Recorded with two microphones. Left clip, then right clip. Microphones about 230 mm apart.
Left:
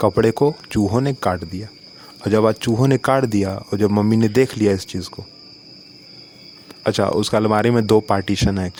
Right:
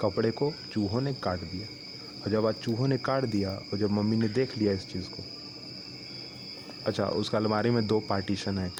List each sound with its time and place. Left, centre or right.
0.0 s speech: left
6.8 s speech: left